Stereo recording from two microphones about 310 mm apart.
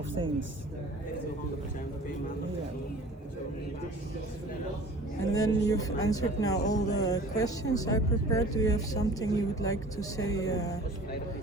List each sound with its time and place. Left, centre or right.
5.3 s speech: centre
6.7 s speech: left
7.0 s speech: centre